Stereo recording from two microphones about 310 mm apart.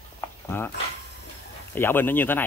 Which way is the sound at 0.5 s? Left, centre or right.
Centre.